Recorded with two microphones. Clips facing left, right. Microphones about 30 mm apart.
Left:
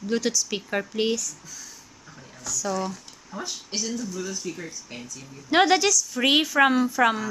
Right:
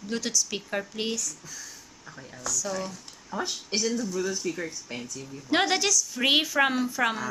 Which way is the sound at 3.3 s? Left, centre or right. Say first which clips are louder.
Right 2 dB; right.